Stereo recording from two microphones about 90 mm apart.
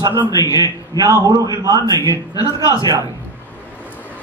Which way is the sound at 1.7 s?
35° left (ahead or behind).